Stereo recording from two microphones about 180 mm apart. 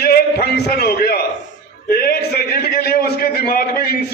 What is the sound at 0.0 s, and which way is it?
A man's voice, 60° left (ahead or behind).